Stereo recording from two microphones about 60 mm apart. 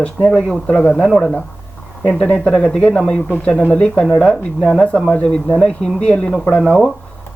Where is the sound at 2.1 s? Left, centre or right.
Centre.